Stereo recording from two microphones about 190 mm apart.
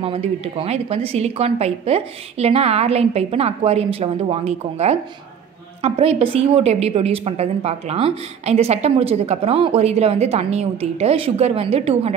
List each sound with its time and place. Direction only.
0.0 s a woman's voice: 30° right (ahead or behind)